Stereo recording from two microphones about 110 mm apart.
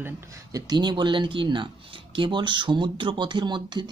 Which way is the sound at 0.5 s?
35° right (ahead or behind).